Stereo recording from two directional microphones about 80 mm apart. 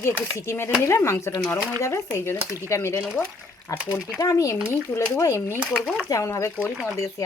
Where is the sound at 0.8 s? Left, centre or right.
Left.